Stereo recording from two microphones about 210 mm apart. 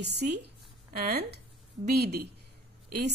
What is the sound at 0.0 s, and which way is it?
A woman's voice, 50° right (ahead or behind).